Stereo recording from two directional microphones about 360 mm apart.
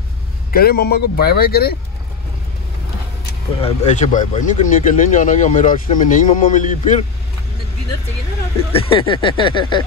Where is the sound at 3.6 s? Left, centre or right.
Centre.